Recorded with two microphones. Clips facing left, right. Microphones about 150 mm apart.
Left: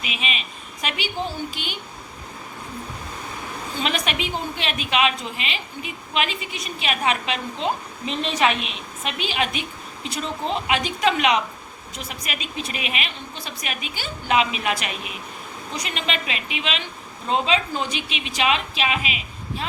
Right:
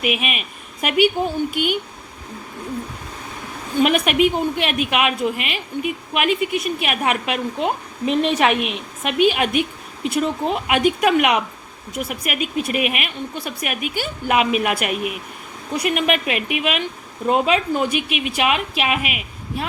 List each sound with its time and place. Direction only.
0.0 s a woman's voice: 60° right (ahead or behind)
3.8 s a woman's voice: 55° right (ahead or behind)
17.8 s a woman's voice: 60° right (ahead or behind)